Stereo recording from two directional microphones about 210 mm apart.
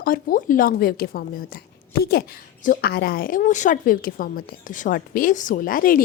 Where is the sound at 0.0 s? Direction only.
40° left (ahead or behind).